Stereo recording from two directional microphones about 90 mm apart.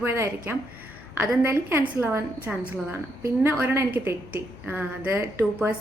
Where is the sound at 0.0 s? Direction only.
25° right (ahead or behind).